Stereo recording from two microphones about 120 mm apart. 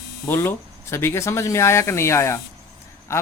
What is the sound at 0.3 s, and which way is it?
Speech, 20° left (ahead or behind).